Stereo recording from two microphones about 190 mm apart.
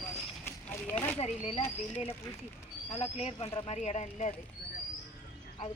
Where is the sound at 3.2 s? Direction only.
30° left (ahead or behind).